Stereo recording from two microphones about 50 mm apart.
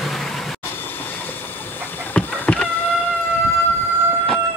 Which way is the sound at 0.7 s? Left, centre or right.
Left.